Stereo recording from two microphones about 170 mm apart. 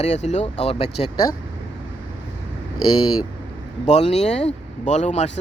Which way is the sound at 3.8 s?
40° left (ahead or behind).